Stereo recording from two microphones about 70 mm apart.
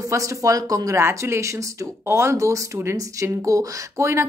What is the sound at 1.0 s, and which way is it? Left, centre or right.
Speech, right.